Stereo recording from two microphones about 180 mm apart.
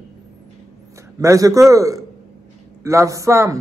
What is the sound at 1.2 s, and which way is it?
A man's voice, 20° right (ahead or behind).